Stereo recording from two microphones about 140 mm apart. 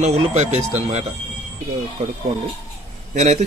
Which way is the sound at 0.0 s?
55° right (ahead or behind).